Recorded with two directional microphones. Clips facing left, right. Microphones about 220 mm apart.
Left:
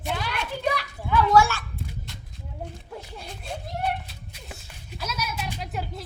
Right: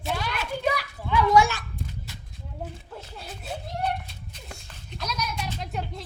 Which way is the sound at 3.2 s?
5° right (ahead or behind).